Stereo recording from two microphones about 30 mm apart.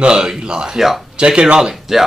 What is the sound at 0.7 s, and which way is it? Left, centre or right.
Speech, centre.